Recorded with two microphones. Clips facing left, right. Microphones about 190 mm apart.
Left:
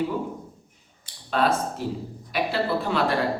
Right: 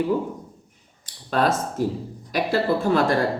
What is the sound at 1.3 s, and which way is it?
Speech, 45° right (ahead or behind).